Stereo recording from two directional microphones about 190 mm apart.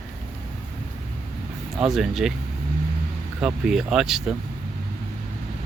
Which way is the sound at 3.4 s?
5° right (ahead or behind).